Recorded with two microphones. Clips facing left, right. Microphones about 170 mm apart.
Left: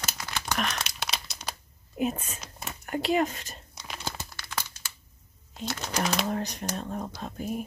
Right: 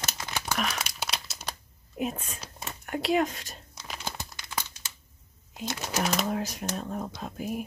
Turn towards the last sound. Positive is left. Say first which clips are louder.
# even
turn(degrees=-5)  # may be behind; listen again after turning